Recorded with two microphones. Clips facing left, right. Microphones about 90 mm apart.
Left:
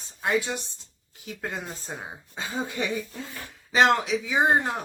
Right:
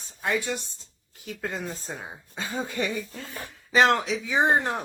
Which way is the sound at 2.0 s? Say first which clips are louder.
Even; 20° left (ahead or behind).